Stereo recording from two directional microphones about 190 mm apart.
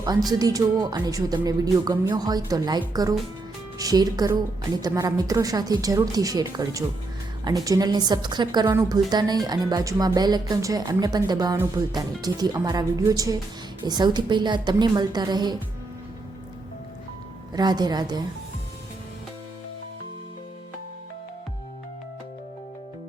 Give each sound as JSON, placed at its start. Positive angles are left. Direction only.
{"t": 0.3, "sound": "speech", "side_deg": -20}
{"t": 17.5, "sound": "speech", "side_deg": -20}